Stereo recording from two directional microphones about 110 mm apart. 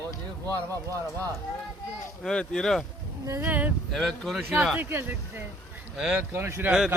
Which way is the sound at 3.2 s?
30° right (ahead or behind).